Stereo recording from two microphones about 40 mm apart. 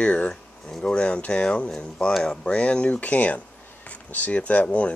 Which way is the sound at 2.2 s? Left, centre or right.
Left.